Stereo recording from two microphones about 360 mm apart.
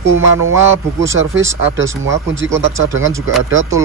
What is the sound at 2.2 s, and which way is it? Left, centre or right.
Speech, right.